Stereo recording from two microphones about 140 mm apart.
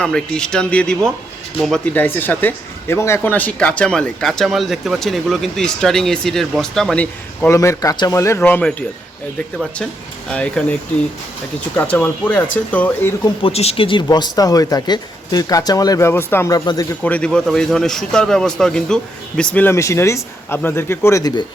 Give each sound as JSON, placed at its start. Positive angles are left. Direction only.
{"t": 0.0, "sound": "speech", "side_deg": 5}
{"t": 7.5, "sound": "speech", "side_deg": 20}
{"t": 10.2, "sound": "speech", "side_deg": 5}
{"t": 11.8, "sound": "speech", "side_deg": 10}
{"t": 13.4, "sound": "speech", "side_deg": 45}
{"t": 17.0, "sound": "speech", "side_deg": 10}